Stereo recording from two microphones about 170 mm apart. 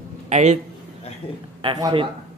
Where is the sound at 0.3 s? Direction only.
40° right (ahead or behind).